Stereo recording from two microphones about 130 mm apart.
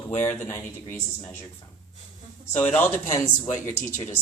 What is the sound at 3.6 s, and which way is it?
Speech, 80° left.